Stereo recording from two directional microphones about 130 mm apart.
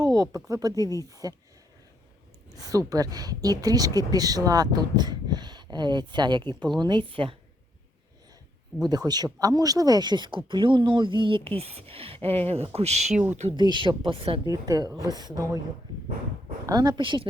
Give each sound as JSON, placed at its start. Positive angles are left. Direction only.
{"t": 0.1, "sound": "a woman's voice", "side_deg": -30}
{"t": 2.5, "sound": "a woman's voice", "side_deg": -25}
{"t": 8.8, "sound": "speech", "side_deg": -30}
{"t": 11.5, "sound": "speech", "side_deg": -50}
{"t": 13.6, "sound": "speech", "side_deg": -35}
{"t": 14.4, "sound": "a woman's voice", "side_deg": -30}
{"t": 16.6, "sound": "speech", "side_deg": -30}